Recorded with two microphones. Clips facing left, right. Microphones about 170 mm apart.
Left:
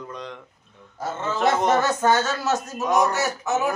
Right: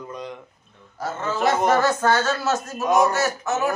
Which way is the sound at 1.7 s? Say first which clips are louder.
Even; 20° left (ahead or behind).